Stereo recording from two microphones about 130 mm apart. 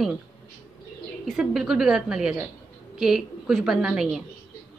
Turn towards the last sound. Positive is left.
turn(degrees=-5)  # may be behind; listen again after turning